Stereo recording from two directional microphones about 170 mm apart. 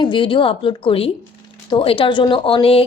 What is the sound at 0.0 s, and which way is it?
A woman's voice, 30° left (ahead or behind).